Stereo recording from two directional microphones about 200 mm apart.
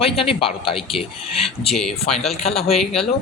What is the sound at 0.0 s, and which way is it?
Speech, 30° left (ahead or behind).